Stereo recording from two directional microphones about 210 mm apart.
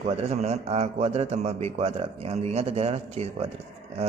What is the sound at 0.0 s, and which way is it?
A man's voice, 30° right (ahead or behind).